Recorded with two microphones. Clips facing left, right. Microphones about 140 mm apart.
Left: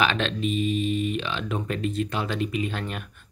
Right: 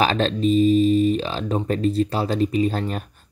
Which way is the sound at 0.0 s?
35° right (ahead or behind).